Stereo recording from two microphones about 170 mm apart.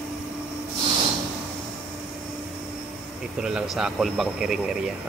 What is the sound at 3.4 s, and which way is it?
Speech, 5° right (ahead or behind).